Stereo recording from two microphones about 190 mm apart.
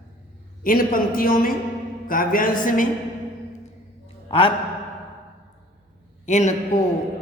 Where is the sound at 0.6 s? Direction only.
50° left (ahead or behind).